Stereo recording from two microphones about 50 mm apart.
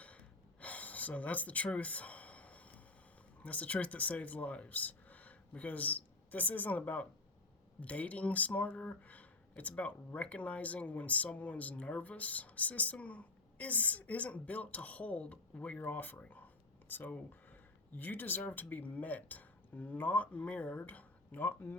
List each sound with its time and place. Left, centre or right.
0.6 s a sound: left
3.4 s speech: left
21.4 s speech: left